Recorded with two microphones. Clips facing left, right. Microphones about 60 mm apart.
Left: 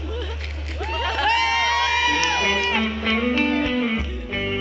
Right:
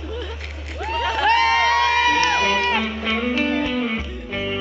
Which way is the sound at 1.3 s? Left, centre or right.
Right.